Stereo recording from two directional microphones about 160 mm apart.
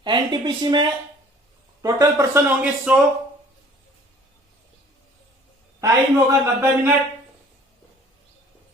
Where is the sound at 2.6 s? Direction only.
5° right (ahead or behind).